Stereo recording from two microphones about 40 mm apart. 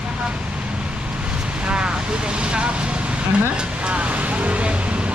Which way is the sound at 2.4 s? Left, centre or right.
Right.